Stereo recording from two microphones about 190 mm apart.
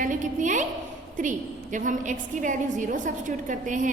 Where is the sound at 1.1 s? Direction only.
40° right (ahead or behind).